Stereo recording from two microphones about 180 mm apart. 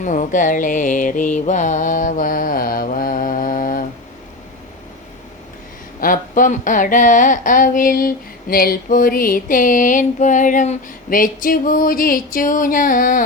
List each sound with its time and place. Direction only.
0.0 s music: 45° left (ahead or behind)
6.0 s speech: 50° left (ahead or behind)